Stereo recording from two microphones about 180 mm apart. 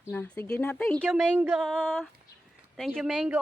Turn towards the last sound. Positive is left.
turn(degrees=-5)  # may be behind; listen again after turning